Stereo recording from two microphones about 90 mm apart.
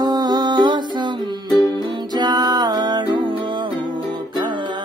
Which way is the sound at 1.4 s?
50° left (ahead or behind).